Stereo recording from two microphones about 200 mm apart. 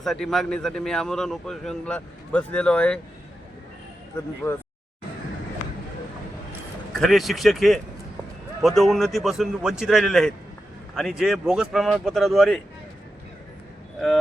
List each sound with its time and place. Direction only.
0.0 s a man's voice: centre (ahead or behind)
7.0 s a man's voice: centre (ahead or behind)